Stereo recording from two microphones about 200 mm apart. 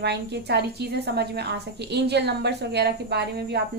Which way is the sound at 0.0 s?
55° right (ahead or behind).